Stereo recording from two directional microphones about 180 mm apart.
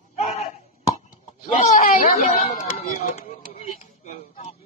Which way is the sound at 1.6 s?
40° left (ahead or behind).